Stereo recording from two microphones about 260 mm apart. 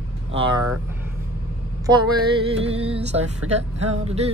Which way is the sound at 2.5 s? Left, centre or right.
Right.